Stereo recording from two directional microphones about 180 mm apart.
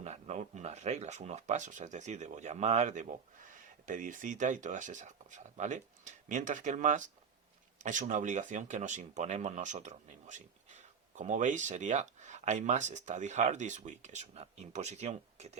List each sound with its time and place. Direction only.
0.0 s speech: 40° right (ahead or behind)